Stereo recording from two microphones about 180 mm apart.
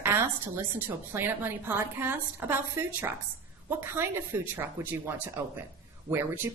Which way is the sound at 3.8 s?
10° right (ahead or behind).